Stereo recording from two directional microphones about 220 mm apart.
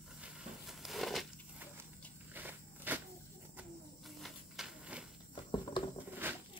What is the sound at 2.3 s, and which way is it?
Walk, 10° right (ahead or behind).